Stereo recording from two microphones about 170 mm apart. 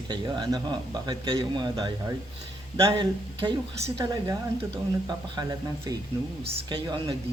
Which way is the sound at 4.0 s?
20° right (ahead or behind).